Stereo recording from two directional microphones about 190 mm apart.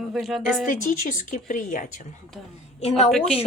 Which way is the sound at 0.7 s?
45° left (ahead or behind).